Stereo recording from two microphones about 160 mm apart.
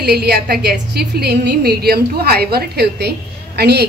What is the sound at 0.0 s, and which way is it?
A woman's voice, 85° right.